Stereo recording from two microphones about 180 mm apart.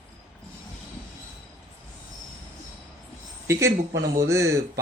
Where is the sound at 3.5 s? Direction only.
15° right (ahead or behind).